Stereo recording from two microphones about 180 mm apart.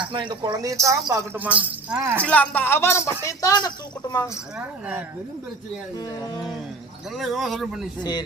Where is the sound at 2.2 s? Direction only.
10° left (ahead or behind).